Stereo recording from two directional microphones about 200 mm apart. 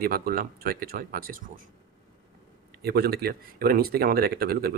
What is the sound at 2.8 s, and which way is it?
Speech, 50° right (ahead or behind).